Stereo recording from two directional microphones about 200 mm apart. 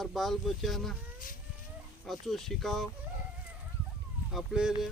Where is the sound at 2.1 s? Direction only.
Centre (ahead or behind).